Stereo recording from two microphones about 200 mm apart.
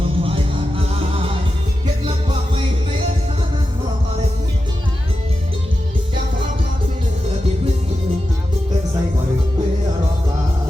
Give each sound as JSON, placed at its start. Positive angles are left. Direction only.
{"t": 0.0, "sound": "music", "side_deg": -25}